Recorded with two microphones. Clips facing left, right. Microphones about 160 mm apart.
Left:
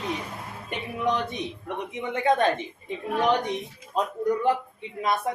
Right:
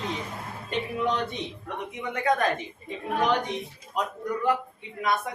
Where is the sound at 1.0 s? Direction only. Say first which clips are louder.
Left 6 dB; 15° left (ahead or behind).